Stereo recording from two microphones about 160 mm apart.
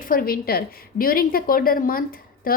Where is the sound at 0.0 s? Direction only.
65° left (ahead or behind).